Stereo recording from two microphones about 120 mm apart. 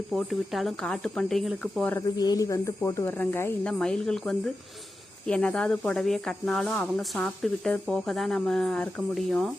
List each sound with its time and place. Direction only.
0.1 s speech: centre (ahead or behind)
2.0 s speech: 35° left (ahead or behind); by 9.5 s centre (ahead or behind)